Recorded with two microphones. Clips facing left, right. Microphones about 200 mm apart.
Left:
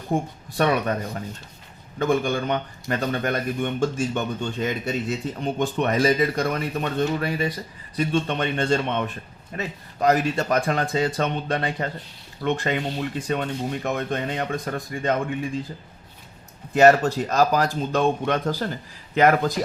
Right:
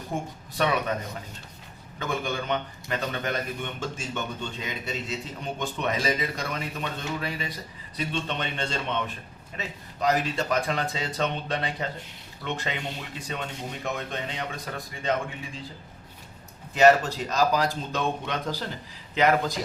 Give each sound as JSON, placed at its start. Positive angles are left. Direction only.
{"t": 0.1, "sound": "a man's voice", "side_deg": 50}
{"t": 2.0, "sound": "a man's voice", "side_deg": 50}
{"t": 16.7, "sound": "a man's voice", "side_deg": 50}